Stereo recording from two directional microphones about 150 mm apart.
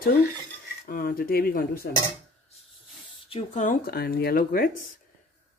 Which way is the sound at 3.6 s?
85° left.